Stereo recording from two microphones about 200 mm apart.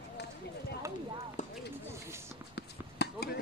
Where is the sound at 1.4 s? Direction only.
35° left (ahead or behind).